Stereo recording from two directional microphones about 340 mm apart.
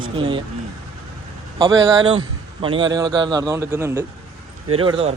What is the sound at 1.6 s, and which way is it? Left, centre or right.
A man's voice, centre.